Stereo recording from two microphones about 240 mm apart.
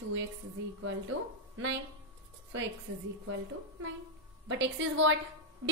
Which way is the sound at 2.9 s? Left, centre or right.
Right.